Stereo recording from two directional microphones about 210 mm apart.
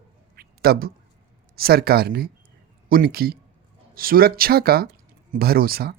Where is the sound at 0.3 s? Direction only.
45° right (ahead or behind).